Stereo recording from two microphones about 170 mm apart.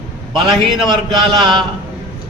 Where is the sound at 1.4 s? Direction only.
30° right (ahead or behind).